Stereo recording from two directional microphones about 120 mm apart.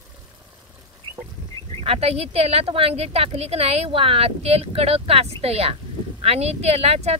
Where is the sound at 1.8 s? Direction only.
55° right (ahead or behind).